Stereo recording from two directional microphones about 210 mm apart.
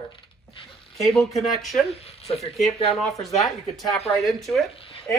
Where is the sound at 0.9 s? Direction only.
Centre (ahead or behind).